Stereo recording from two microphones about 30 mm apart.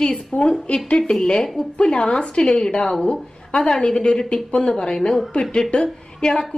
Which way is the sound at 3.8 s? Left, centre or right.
Left.